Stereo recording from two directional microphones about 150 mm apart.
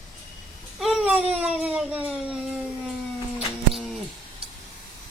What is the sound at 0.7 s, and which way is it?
A man's voice, centre (ahead or behind).